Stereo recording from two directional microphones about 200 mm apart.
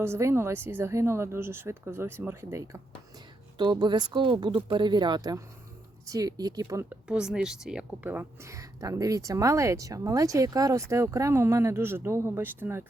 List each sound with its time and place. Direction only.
0.0 s speech: 15° right (ahead or behind)